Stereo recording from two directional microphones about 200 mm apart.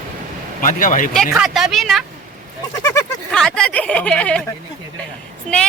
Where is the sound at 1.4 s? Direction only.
Centre (ahead or behind).